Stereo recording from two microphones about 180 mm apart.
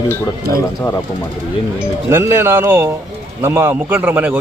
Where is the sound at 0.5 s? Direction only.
15° left (ahead or behind).